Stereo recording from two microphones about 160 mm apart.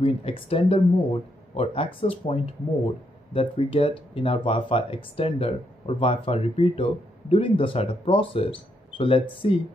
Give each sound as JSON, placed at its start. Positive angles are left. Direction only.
{"t": 0.0, "sound": "speech", "side_deg": 35}